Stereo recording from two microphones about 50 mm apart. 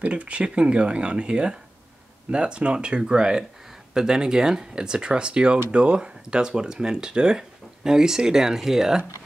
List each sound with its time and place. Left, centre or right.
0.0 s speech: right